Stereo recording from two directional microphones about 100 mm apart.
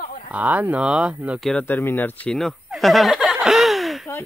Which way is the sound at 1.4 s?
10° left (ahead or behind).